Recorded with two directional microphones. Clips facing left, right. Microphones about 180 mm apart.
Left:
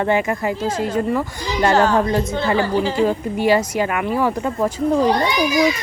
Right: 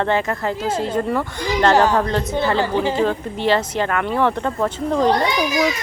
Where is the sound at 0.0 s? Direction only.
15° left (ahead or behind).